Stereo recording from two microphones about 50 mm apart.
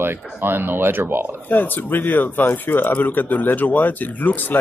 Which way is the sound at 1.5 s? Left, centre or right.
Left.